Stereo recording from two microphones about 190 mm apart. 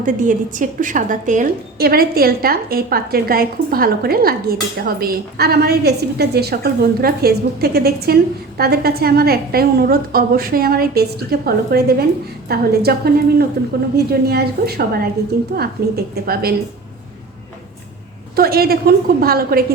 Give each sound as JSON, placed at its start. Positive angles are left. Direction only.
{"t": 0.0, "sound": "a woman's voice", "side_deg": -45}
{"t": 18.3, "sound": "a woman's voice", "side_deg": -55}